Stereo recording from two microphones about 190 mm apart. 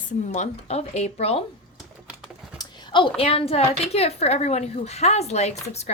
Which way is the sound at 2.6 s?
25° left (ahead or behind).